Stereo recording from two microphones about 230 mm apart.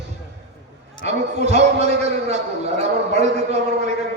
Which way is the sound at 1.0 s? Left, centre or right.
Right.